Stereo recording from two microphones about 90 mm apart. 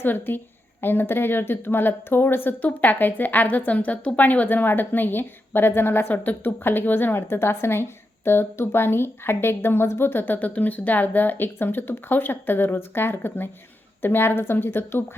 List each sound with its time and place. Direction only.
0.0 s a woman's voice: 25° left (ahead or behind)